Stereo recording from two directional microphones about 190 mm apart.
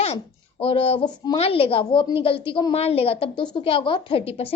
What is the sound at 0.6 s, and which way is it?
A woman's voice, 30° left (ahead or behind).